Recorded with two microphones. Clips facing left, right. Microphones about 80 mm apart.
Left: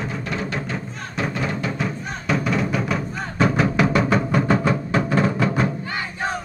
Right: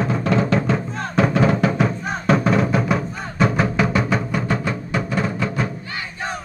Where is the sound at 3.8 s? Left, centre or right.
Centre.